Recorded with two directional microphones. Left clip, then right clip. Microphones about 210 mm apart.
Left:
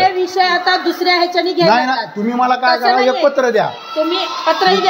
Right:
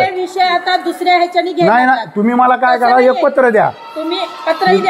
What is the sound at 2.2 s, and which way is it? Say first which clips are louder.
A man's voice: right 3 dB; 40° right (ahead or behind).